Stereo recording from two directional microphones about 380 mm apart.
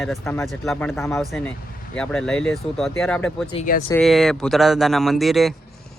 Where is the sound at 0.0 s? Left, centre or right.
Centre.